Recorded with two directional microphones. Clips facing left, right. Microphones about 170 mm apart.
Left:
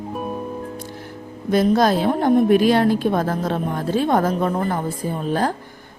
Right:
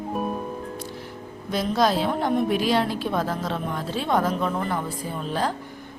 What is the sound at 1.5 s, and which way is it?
A woman's voice, 50° left (ahead or behind).